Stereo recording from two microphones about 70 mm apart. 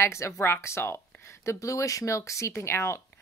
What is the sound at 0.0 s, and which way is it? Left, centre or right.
Speech, left.